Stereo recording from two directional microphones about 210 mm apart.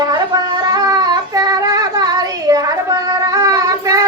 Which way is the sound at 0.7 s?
15° right (ahead or behind).